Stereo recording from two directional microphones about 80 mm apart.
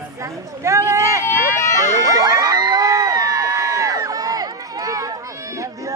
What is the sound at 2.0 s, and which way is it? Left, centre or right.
Crowd, right.